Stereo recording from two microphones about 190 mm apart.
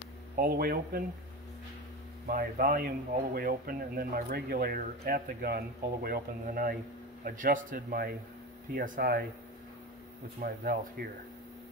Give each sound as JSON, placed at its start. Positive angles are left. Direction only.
{"t": 0.4, "sound": "speech", "side_deg": -50}
{"t": 2.2, "sound": "speech", "side_deg": -45}
{"t": 10.4, "sound": "speech", "side_deg": -50}